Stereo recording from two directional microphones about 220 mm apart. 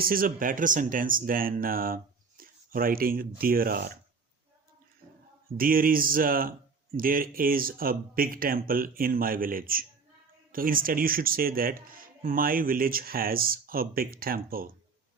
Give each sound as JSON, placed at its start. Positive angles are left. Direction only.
{"t": 0.0, "sound": "speech", "side_deg": -40}
{"t": 5.5, "sound": "speech", "side_deg": -40}